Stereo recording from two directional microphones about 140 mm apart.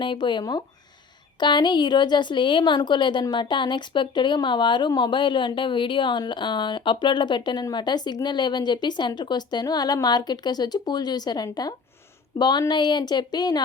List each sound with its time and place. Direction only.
0.0 s a woman's voice: 35° left (ahead or behind)